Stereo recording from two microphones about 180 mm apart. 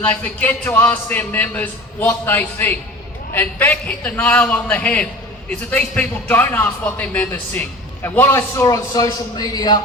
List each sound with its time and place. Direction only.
0.0 s a man's voice: 5° left (ahead or behind); by 9.8 s 20° left (ahead or behind)